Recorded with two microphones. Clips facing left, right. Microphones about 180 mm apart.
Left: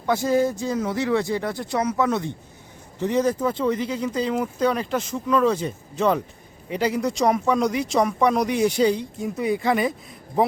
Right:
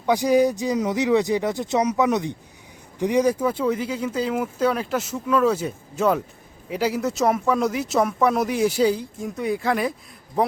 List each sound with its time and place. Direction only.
0.0 s speech: 15° right (ahead or behind); by 10.5 s centre (ahead or behind)